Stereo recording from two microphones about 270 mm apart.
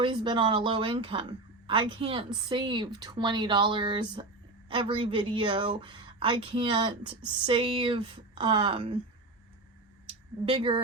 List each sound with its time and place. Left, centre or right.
0.0 s a woman's voice: centre
10.4 s speech: centre